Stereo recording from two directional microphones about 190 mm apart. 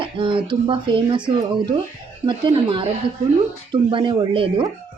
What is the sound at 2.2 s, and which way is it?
Speech, 25° right (ahead or behind).